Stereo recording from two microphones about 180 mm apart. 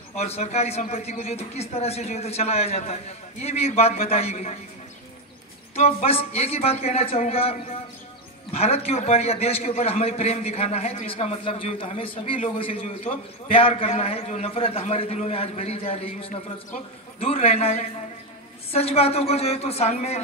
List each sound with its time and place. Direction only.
0.1 s a man's voice: 35° left (ahead or behind)
5.8 s a man's voice: 35° left (ahead or behind)
8.5 s a man's voice: 35° left (ahead or behind)